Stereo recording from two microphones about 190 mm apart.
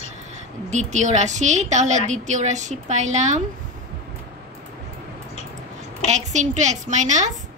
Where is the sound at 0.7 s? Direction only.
40° right (ahead or behind).